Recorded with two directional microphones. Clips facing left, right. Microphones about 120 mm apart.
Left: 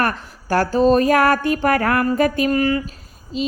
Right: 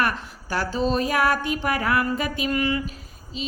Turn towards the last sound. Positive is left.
turn(degrees=40)  # may be behind; listen again after turning